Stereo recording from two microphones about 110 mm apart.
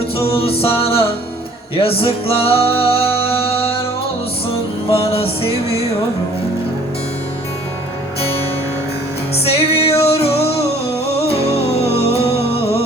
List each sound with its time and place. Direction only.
0.2 s music: 60° left (ahead or behind)
4.9 s music: 60° left (ahead or behind)
9.4 s music: 65° left (ahead or behind)